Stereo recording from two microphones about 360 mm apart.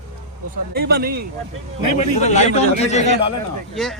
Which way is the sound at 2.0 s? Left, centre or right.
Centre.